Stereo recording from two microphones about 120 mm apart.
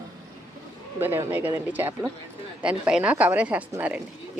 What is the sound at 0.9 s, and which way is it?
Speech, 20° right (ahead or behind).